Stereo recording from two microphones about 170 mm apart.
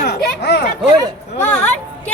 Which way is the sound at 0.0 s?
70° left (ahead or behind).